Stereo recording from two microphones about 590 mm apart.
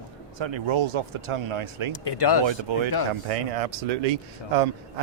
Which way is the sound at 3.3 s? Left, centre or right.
Right.